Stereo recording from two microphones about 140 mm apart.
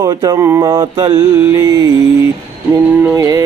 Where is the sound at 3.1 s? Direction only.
25° right (ahead or behind).